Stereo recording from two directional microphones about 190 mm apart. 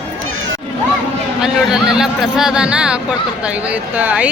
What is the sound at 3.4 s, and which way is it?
Speech, 5° right (ahead or behind).